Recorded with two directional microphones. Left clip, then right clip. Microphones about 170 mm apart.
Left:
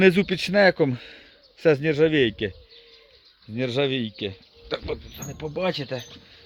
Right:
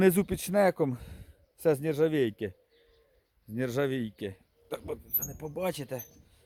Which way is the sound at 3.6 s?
35° right (ahead or behind).